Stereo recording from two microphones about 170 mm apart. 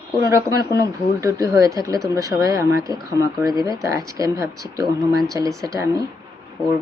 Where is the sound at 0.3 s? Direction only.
20° right (ahead or behind).